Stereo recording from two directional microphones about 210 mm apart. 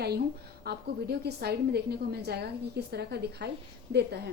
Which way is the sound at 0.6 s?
50° right (ahead or behind).